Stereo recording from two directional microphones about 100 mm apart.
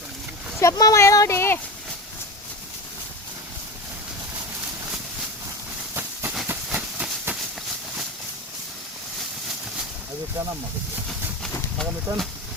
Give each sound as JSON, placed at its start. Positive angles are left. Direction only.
{"t": 0.6, "sound": "speech", "side_deg": 35}
{"t": 5.9, "sound": "train", "side_deg": -20}
{"t": 11.8, "sound": "speech", "side_deg": 0}